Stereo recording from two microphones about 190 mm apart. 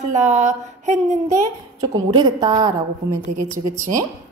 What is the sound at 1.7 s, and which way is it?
Speech, 20° right (ahead or behind).